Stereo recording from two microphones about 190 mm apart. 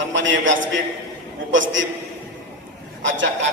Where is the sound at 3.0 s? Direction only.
75° right (ahead or behind).